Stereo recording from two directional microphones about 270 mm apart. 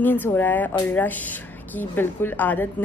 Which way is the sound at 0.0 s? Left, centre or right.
Centre.